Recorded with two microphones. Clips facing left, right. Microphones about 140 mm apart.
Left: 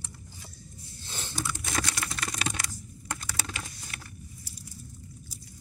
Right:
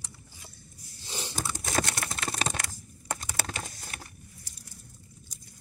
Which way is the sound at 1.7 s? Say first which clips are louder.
Right 5 dB; 50° right (ahead or behind).